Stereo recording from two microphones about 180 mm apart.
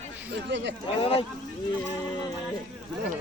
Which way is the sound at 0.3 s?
80° right.